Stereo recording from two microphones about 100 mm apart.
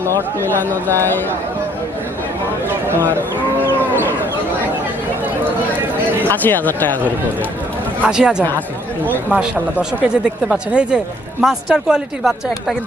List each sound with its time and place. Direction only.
0.3 s speech: 20° left (ahead or behind)
2.6 s speech: 25° right (ahead or behind)
3.2 s moo: 20° right (ahead or behind)
6.2 s speech: 20° left (ahead or behind)
8.0 s speech: 10° right (ahead or behind)